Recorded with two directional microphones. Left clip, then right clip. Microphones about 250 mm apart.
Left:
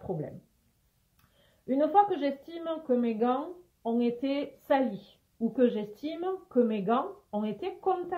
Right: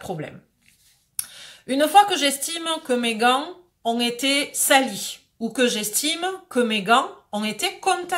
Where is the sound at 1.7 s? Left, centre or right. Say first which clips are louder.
Right 8 dB; centre.